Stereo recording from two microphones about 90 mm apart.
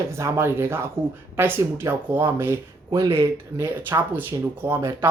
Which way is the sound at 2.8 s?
45° right (ahead or behind).